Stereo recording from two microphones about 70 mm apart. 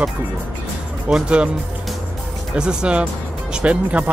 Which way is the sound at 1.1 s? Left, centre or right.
Centre.